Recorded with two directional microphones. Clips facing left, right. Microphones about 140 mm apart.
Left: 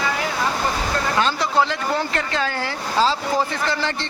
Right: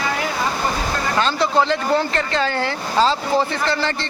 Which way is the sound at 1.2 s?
10° left (ahead or behind).